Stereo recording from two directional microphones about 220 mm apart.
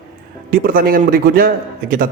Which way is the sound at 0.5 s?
40° right (ahead or behind).